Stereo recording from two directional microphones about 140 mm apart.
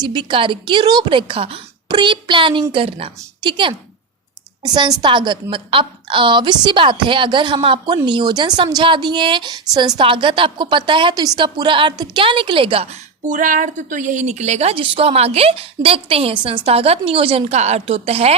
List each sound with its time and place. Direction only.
0.0 s a woman's voice: 30° right (ahead or behind)
13.2 s a woman's voice: 70° right (ahead or behind); by 18.3 s 45° right (ahead or behind)